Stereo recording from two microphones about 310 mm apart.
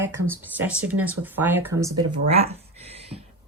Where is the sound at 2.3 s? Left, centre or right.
Centre.